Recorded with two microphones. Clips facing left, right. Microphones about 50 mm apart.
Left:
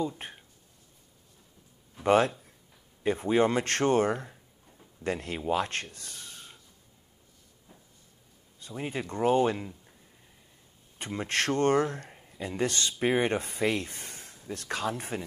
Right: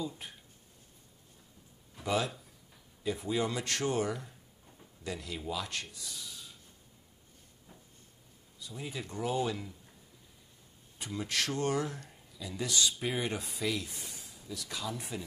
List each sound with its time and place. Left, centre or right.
2.0 s speech: left
8.5 s speech: left
11.0 s speech: left